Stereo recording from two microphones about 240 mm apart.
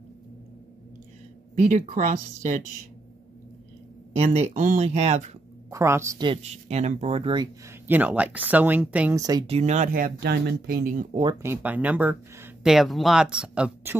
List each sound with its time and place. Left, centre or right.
1.5 s speech: right
4.2 s speech: right
5.7 s speech: centre
9.6 s speech: right
11.4 s speech: centre